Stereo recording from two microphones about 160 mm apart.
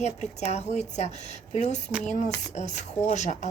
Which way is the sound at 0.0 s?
45° left (ahead or behind).